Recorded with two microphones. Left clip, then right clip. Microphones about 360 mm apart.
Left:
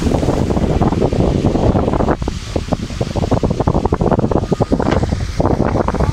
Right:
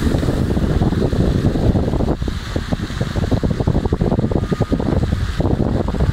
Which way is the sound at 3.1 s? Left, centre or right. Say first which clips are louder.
Left 5 dB; left.